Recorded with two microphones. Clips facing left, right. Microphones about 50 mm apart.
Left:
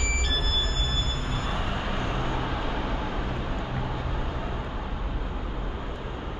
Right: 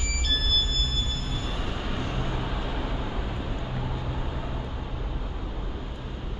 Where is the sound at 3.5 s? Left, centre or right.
Left.